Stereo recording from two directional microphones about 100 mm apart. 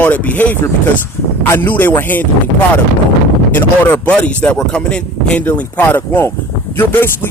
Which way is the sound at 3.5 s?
20° left (ahead or behind).